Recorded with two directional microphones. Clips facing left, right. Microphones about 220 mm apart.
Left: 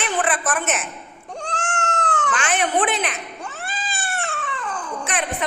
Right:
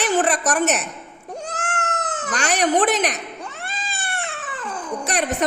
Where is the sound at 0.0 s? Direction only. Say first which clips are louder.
Right 4 dB; 40° right (ahead or behind).